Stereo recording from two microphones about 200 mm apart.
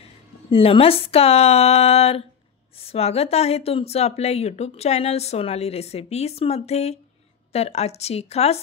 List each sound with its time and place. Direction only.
0.0 s speech: 30° left (ahead or behind)